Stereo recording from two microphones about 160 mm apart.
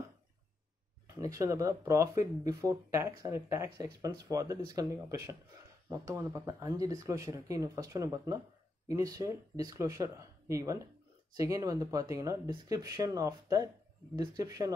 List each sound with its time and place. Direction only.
1.0 s speech: 20° right (ahead or behind)